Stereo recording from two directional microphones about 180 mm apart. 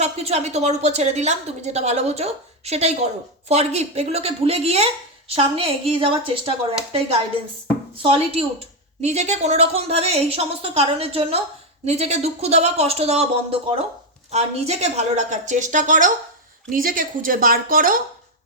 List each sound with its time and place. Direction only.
0.0 s a woman's voice: 35° right (ahead or behind)
7.9 s a woman's voice: 30° right (ahead or behind); by 17.9 s 50° right (ahead or behind)